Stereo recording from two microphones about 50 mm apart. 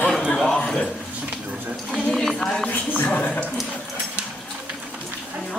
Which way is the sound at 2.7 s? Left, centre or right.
Left.